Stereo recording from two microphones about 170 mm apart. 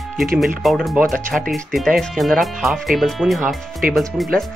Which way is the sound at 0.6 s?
Centre (ahead or behind).